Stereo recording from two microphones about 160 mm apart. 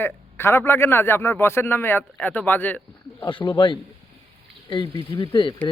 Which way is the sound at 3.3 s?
30° left (ahead or behind).